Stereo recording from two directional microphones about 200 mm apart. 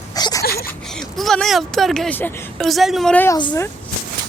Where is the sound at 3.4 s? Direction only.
25° left (ahead or behind).